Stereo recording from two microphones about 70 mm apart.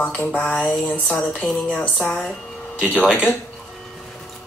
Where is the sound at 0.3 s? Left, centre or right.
Left.